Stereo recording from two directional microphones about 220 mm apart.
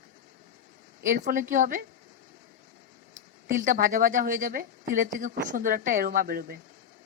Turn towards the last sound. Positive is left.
turn(degrees=-40)  # may be behind; listen again after turning